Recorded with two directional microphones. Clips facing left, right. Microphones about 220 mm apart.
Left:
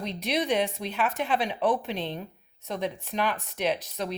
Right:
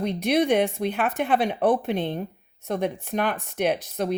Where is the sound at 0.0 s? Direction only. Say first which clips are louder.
Right 7 dB; 55° right (ahead or behind).